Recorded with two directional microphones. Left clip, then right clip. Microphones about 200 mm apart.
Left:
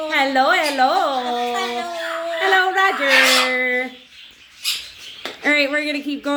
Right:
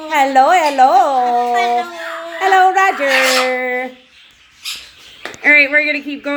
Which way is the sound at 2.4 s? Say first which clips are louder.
Right 6 dB; 15° right (ahead or behind).